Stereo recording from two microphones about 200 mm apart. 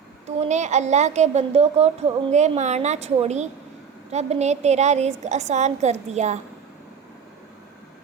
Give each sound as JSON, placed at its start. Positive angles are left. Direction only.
{"t": 0.3, "sound": "a woman's voice", "side_deg": -35}